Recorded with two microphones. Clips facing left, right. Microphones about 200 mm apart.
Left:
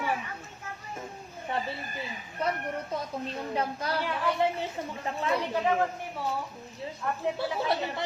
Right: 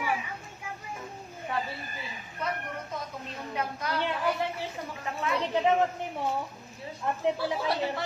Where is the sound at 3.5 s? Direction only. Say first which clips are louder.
Left 1 dB; 30° left (ahead or behind).